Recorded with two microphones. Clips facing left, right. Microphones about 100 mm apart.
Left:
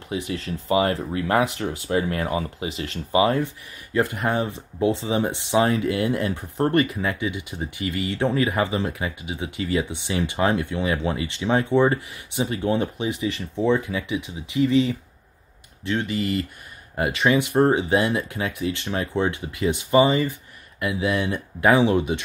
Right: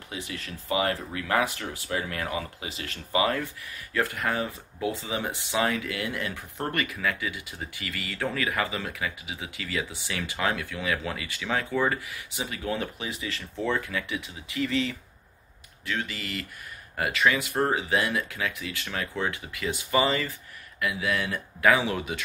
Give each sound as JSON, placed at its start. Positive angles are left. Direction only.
{"t": 0.3, "sound": "speech", "side_deg": 30}